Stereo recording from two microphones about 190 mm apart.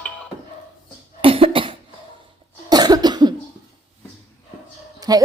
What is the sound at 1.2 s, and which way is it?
Cough, 30° right (ahead or behind).